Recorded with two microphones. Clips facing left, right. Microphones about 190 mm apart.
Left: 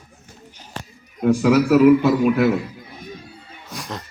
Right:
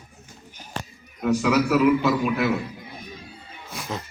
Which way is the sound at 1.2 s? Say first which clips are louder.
Left 5 dB; 45° left (ahead or behind).